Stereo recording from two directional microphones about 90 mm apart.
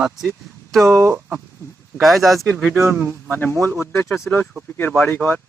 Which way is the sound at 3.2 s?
20° left (ahead or behind).